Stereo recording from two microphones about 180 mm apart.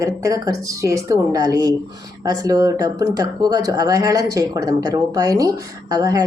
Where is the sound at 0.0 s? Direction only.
15° right (ahead or behind).